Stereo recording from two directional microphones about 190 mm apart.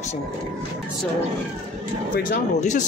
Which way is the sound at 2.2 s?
40° left (ahead or behind).